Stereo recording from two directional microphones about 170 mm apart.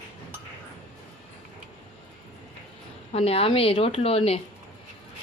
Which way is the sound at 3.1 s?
35° left (ahead or behind).